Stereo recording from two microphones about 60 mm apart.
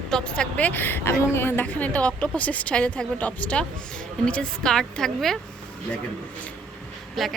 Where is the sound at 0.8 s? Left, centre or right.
Left.